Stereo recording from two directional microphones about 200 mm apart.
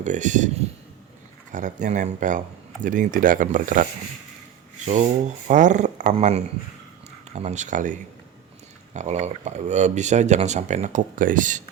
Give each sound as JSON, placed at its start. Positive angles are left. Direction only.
{"t": 0.0, "sound": "speech", "side_deg": -35}
{"t": 1.5, "sound": "speech", "side_deg": -40}
{"t": 5.5, "sound": "speech", "side_deg": -40}